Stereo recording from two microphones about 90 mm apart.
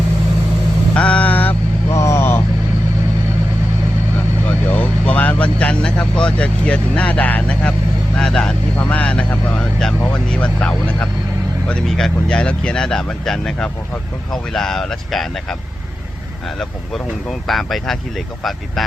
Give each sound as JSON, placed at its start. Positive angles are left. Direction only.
{"t": 0.9, "sound": "vehicle", "side_deg": 10}
{"t": 1.9, "sound": "vehicle", "side_deg": 35}
{"t": 4.4, "sound": "speech", "side_deg": 20}
{"t": 16.6, "sound": "speech", "side_deg": 5}